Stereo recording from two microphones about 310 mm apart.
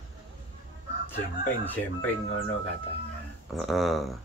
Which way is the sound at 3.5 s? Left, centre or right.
Centre.